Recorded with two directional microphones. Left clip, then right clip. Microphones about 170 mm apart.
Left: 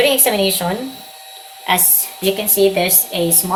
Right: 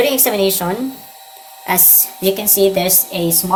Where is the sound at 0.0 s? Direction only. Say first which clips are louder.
Even; 60° right (ahead or behind).